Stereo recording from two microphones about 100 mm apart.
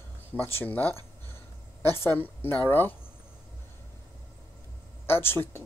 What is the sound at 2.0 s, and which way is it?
Speech, 25° left (ahead or behind).